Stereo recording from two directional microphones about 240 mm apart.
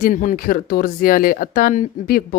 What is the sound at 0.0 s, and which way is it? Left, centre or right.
Speech, left.